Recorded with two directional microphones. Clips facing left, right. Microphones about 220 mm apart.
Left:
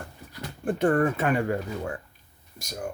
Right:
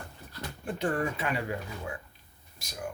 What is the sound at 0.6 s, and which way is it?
Speech, 50° left (ahead or behind).